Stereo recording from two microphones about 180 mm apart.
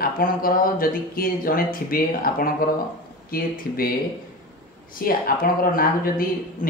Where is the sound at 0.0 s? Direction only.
55° left (ahead or behind).